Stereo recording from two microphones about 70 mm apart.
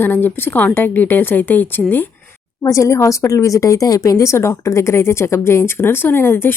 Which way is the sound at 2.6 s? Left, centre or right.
Left.